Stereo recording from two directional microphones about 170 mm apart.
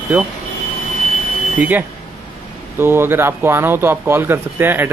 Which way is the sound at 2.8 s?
15° right (ahead or behind).